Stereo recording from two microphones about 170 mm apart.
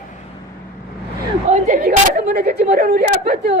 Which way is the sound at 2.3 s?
65° right (ahead or behind).